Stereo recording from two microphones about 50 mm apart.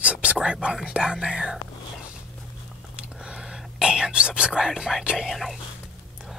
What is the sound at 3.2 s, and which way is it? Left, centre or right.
Whispering, centre.